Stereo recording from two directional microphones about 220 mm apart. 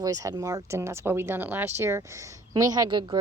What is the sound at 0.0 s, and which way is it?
Speech, 15° right (ahead or behind).